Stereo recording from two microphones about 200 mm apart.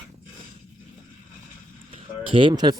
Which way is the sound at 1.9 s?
25° right (ahead or behind).